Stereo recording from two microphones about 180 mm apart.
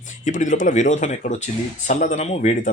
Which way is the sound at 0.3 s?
45° left (ahead or behind).